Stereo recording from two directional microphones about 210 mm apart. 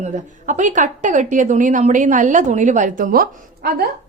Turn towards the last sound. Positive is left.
turn(degrees=-45)  # may be behind; listen again after turning